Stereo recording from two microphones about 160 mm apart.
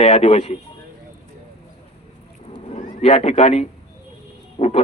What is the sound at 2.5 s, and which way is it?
Cat, 40° left (ahead or behind).